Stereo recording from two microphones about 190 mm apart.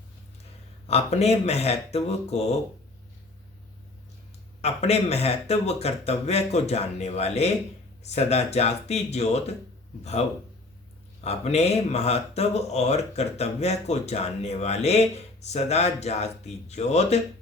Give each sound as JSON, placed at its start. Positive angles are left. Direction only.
{"t": 0.9, "sound": "speech", "side_deg": 35}
{"t": 4.6, "sound": "speech", "side_deg": 35}